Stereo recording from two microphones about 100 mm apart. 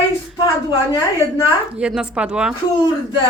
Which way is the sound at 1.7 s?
10° right (ahead or behind).